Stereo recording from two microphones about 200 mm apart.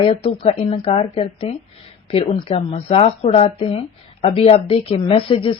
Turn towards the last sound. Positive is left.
turn(degrees=25)  # may be behind; listen again after turning